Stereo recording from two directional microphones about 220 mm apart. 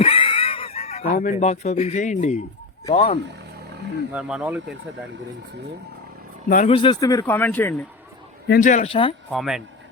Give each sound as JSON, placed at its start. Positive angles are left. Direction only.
{"t": 0.0, "sound": "a sound", "side_deg": 25}
{"t": 2.9, "sound": "speech", "side_deg": 30}
{"t": 4.1, "sound": "speech", "side_deg": -5}
{"t": 6.5, "sound": "speech", "side_deg": 35}
{"t": 6.7, "sound": "speech", "side_deg": 20}
{"t": 8.4, "sound": "speech", "side_deg": 40}
{"t": 9.3, "sound": "speech", "side_deg": 0}